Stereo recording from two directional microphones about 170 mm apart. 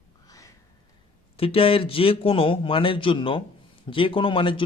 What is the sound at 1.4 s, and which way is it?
A man's voice, 35° left (ahead or behind).